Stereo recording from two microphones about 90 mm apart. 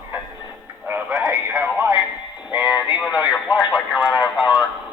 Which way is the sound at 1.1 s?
35° right (ahead or behind).